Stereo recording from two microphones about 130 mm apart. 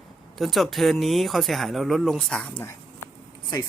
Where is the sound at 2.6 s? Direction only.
20° left (ahead or behind).